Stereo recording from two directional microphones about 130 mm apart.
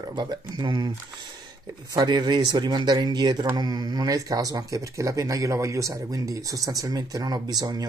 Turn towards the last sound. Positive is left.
turn(degrees=-30)  # may be behind; listen again after turning